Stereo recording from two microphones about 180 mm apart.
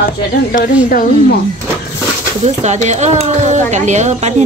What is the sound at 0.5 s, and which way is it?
Speech, 50° left (ahead or behind).